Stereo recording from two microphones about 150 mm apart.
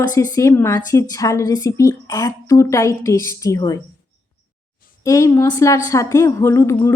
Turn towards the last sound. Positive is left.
turn(degrees=20)  # may be behind; listen again after turning